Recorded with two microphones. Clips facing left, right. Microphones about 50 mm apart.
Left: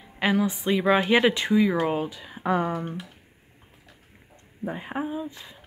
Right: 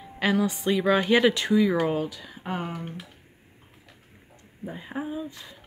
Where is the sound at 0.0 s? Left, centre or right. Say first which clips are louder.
Left 1 dB; centre.